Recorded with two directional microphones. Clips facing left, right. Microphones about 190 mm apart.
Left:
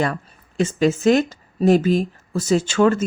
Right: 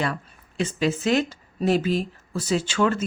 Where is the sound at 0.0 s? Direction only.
45° left (ahead or behind).